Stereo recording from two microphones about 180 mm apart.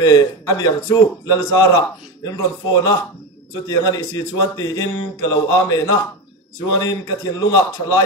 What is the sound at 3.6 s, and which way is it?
A man's voice, 20° left (ahead or behind).